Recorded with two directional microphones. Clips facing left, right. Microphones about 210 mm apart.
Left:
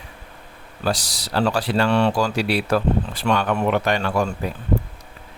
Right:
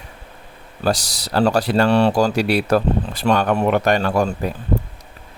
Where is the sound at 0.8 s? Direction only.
40° right (ahead or behind).